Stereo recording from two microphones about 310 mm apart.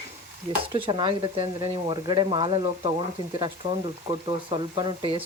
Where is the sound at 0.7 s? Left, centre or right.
Centre.